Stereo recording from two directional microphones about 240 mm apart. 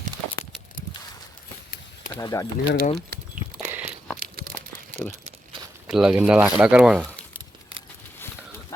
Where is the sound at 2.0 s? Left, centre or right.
Centre.